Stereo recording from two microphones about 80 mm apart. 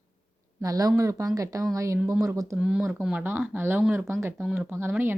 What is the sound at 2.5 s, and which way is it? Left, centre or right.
Speech, centre.